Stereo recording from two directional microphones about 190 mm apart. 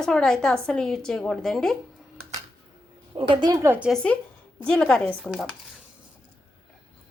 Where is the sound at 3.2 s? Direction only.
25° right (ahead or behind); by 5.5 s centre (ahead or behind).